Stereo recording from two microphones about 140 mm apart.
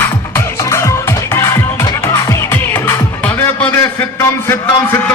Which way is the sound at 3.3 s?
15° left (ahead or behind).